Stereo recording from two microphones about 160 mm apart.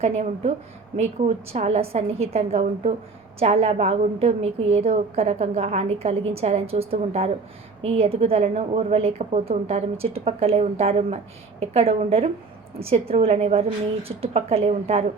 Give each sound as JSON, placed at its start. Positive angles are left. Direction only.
{"t": 0.0, "sound": "a woman's voice", "side_deg": -40}
{"t": 1.5, "sound": "a woman's voice", "side_deg": -45}